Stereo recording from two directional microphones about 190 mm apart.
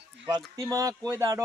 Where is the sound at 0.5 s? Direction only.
15° right (ahead or behind).